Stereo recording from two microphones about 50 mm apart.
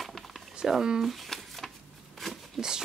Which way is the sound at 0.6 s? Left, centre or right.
Centre.